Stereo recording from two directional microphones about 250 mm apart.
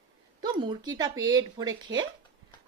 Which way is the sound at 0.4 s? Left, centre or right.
Centre.